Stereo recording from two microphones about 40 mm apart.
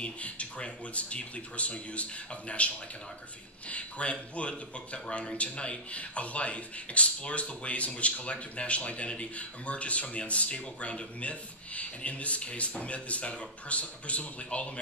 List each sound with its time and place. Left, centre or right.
0.0 s speech: left